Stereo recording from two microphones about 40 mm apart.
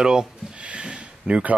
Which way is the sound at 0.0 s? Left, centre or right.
Centre.